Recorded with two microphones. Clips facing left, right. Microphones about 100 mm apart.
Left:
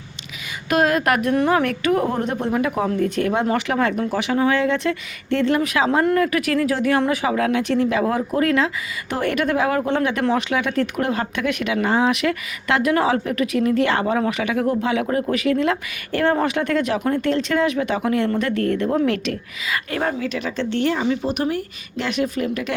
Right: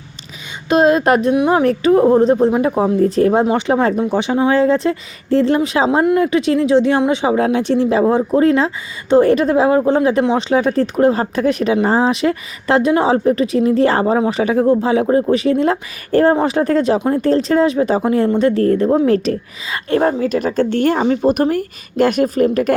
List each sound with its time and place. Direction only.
0.7 s a woman's voice: 25° right (ahead or behind); by 22.7 s 45° right (ahead or behind)